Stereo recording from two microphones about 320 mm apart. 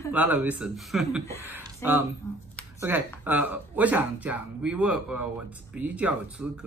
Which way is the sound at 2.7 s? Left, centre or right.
Centre.